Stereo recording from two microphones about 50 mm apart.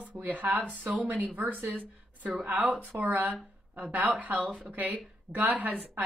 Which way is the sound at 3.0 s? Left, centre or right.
Right.